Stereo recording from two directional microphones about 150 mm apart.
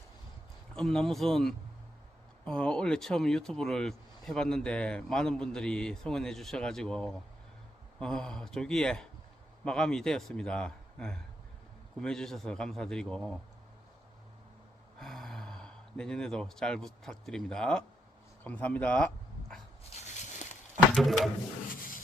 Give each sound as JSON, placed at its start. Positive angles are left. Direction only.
{"t": 0.8, "sound": "speech", "side_deg": 5}
{"t": 14.9, "sound": "speech", "side_deg": 0}
{"t": 20.0, "sound": "a sound", "side_deg": 55}
{"t": 20.9, "sound": "speech", "side_deg": 0}